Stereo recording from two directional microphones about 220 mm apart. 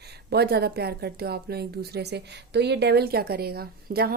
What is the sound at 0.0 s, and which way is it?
Speech, 50° right (ahead or behind).